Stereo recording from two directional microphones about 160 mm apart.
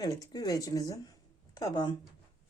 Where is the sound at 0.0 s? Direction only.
25° left (ahead or behind).